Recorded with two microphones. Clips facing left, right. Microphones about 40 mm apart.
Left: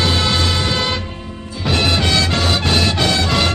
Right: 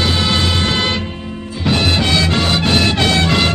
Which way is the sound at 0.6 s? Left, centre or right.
Right.